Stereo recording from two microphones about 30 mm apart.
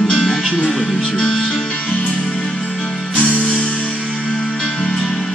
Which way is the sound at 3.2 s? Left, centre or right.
Left.